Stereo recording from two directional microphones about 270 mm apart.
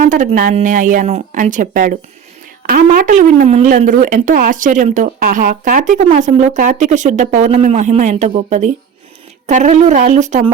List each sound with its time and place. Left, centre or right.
0.0 s speech: right